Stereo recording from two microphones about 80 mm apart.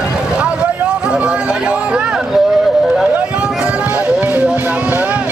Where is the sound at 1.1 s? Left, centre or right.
Centre.